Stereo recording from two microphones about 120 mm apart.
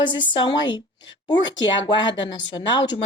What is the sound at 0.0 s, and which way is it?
A woman's voice, 40° left (ahead or behind).